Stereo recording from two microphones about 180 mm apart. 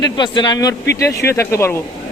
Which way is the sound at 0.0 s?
25° left (ahead or behind).